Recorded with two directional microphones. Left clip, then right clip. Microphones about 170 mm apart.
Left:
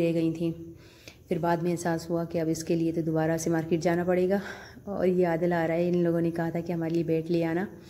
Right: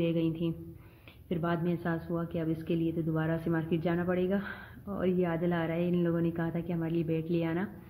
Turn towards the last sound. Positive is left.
turn(degrees=20)  # may be behind; listen again after turning